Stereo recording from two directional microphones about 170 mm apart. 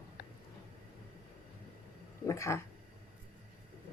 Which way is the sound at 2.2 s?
15° left (ahead or behind).